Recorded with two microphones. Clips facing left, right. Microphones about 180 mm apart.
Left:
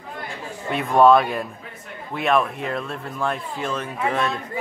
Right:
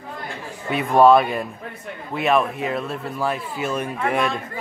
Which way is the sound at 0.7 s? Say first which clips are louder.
Right 1 dB; centre (ahead or behind).